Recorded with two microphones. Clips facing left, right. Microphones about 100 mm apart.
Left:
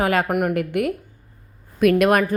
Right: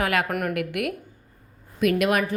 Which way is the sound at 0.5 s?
30° left (ahead or behind).